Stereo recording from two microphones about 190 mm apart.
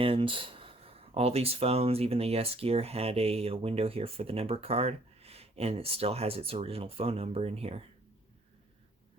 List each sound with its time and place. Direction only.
0.0 s speech: 30° right (ahead or behind)